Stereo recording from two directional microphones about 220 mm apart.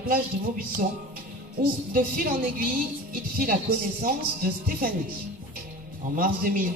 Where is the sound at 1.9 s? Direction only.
40° right (ahead or behind).